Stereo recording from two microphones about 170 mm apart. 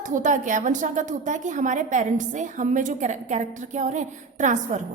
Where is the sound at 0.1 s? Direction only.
45° right (ahead or behind).